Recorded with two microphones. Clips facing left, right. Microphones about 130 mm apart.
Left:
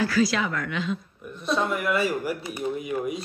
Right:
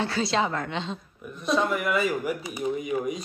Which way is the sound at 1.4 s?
Centre (ahead or behind).